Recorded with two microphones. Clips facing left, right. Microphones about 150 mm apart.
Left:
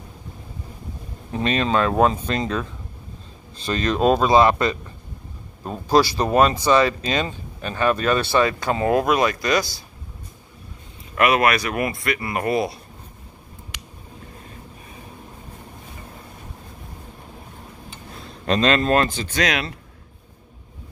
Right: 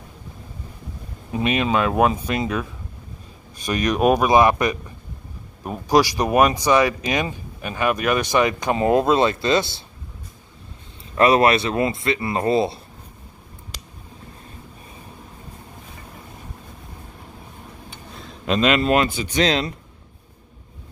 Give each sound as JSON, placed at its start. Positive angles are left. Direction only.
{"t": 1.3, "sound": "speech", "side_deg": -10}
{"t": 11.1, "sound": "speech", "side_deg": -30}
{"t": 18.2, "sound": "a sound", "side_deg": -5}
{"t": 18.9, "sound": "speech", "side_deg": -10}
{"t": 19.4, "sound": "speech", "side_deg": -25}